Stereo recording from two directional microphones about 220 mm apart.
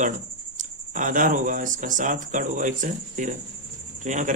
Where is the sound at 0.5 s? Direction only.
35° right (ahead or behind).